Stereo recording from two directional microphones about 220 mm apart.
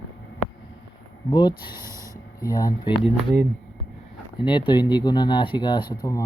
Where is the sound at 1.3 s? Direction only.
20° left (ahead or behind).